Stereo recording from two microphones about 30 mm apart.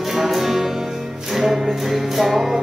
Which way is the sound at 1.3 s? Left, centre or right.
Centre.